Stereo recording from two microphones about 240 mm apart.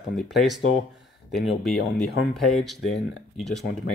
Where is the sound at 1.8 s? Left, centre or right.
Left.